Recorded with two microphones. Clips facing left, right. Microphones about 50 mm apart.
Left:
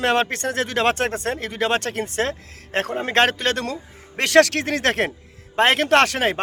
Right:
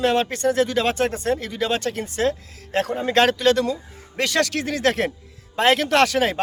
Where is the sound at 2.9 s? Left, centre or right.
Left.